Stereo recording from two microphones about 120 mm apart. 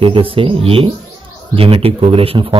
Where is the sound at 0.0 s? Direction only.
50° right (ahead or behind).